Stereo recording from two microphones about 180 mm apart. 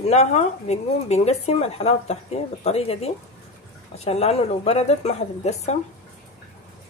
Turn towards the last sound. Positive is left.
turn(degrees=35)  # may be behind; listen again after turning